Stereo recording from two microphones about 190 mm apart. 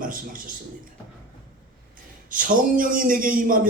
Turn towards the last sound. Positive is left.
turn(degrees=-45)  # may be behind; listen again after turning